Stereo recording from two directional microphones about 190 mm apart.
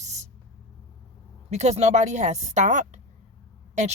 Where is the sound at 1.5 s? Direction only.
35° right (ahead or behind).